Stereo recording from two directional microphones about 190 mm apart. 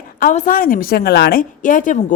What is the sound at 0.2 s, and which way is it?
A woman's voice, 45° left (ahead or behind).